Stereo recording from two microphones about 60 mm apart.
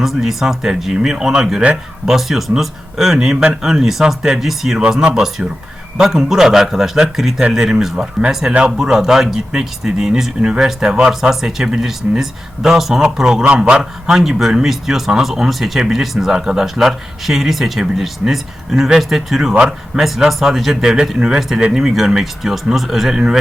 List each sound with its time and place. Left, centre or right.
0.0 s speech: centre
4.8 s speech: centre